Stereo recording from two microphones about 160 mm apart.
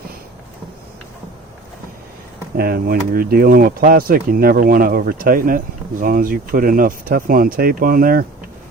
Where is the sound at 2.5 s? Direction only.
70° right (ahead or behind).